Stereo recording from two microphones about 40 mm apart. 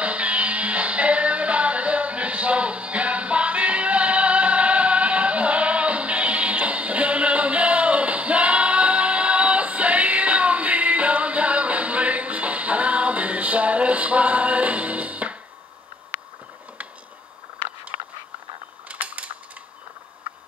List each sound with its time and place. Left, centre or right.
0.0 s music: right
16.1 s a sound: right
18.9 s mechanisms: right